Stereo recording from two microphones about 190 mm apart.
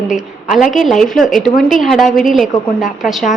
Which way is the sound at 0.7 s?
Centre (ahead or behind).